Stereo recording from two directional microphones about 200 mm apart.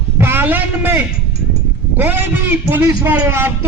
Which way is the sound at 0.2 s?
10° right (ahead or behind).